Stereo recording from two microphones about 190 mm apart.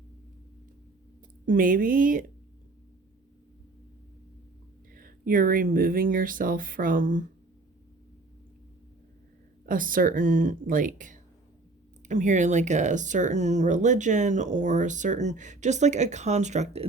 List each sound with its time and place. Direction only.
1.5 s speech: 45° right (ahead or behind)
4.9 s speech: 45° right (ahead or behind)
9.6 s speech: 45° right (ahead or behind)